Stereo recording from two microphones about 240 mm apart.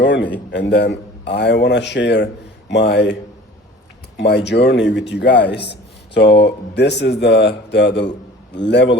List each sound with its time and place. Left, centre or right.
0.0 s a man's voice: left
4.2 s a man's voice: left